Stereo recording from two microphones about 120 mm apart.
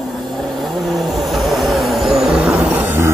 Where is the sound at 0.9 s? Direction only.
Centre (ahead or behind).